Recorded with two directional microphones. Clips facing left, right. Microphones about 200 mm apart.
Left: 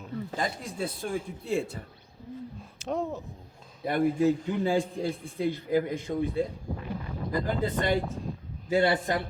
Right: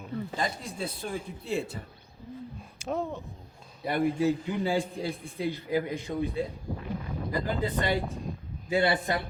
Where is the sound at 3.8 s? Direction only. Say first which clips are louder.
Left 2 dB; 50° left (ahead or behind).